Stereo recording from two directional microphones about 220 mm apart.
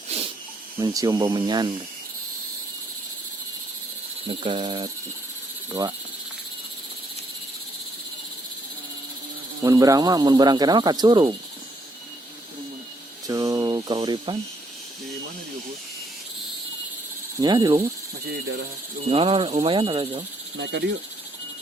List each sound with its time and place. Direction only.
0.1 s snake: 25° right (ahead or behind)
0.8 s speech: 15° right (ahead or behind)
4.3 s speech: 25° right (ahead or behind)
9.6 s speech: 15° right (ahead or behind)
13.2 s speech: 15° right (ahead or behind)
17.4 s speech: 20° right (ahead or behind)
19.0 s speech: 25° right (ahead or behind)
20.6 s speech: 50° right (ahead or behind)